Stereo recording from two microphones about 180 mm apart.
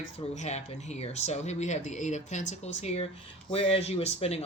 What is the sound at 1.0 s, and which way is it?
Speech, 35° left (ahead or behind).